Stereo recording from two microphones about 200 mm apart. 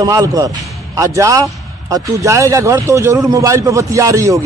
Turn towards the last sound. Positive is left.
turn(degrees=-15)  # may be behind; listen again after turning